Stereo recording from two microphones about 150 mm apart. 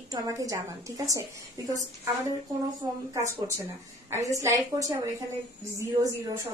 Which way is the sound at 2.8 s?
25° right (ahead or behind).